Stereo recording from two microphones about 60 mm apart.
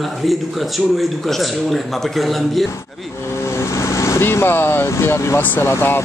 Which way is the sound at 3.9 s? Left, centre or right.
Left.